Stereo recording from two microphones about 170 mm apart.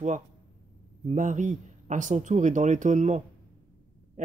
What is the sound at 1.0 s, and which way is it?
Speech, 45° right (ahead or behind).